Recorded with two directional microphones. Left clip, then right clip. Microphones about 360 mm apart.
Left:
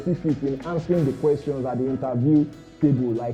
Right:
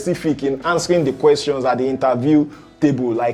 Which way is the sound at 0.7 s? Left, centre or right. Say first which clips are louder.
Right 8 dB; centre.